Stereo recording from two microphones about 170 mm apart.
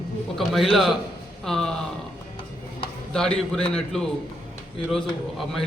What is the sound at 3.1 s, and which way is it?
Speech, 5° left (ahead or behind).